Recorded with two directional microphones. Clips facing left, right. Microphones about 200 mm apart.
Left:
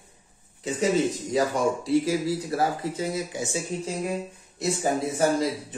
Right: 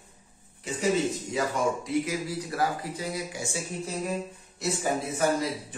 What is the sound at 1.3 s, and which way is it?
Speech, 30° left (ahead or behind).